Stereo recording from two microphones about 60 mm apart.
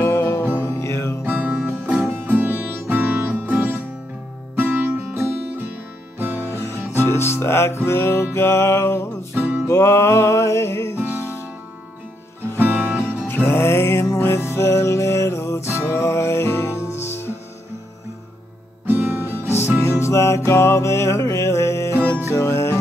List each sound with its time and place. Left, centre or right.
0.0 s music: left
0.4 s music: left
0.7 s music: left
1.2 s music: right
1.8 s music: right
6.3 s music: left
12.8 s music: left
18.9 s guitar: right
19.5 s music: left